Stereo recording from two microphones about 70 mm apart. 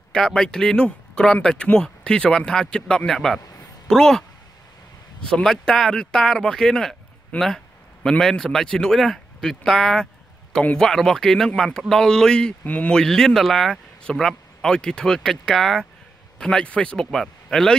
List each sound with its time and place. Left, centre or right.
0.1 s speech: centre
5.2 s speech: centre
13.0 s speech: centre